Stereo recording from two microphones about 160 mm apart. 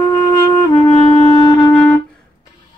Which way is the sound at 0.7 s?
30° left (ahead or behind).